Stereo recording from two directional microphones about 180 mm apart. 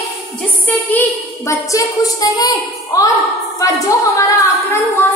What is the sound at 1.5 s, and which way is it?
A woman's voice, 15° left (ahead or behind).